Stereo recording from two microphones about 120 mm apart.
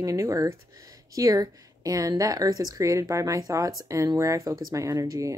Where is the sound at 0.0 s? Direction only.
25° right (ahead or behind).